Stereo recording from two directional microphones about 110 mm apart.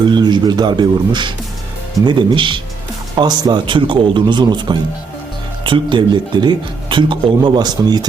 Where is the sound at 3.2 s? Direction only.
40° right (ahead or behind).